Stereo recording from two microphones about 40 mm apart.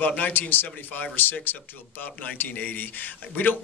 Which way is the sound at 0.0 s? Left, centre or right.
Left.